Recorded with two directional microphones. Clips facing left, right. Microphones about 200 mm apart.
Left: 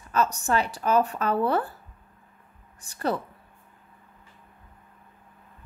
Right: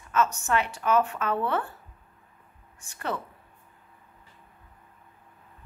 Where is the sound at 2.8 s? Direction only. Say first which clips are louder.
Left 5 dB; 35° left (ahead or behind).